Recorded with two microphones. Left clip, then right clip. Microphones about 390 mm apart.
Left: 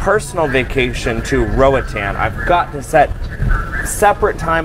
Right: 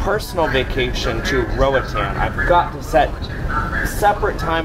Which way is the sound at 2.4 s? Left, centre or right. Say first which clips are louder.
Even; left.